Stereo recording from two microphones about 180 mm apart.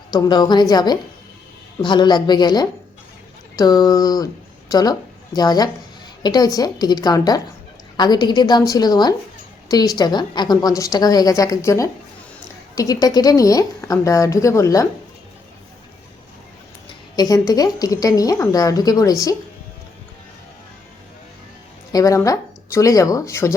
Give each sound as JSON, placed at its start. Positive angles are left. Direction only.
{"t": 0.1, "sound": "a woman's voice", "side_deg": 25}
{"t": 17.2, "sound": "a woman's voice", "side_deg": 20}
{"t": 21.9, "sound": "a woman's voice", "side_deg": 20}